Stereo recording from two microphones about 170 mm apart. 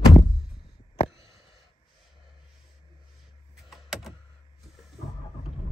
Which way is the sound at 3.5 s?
Centre (ahead or behind).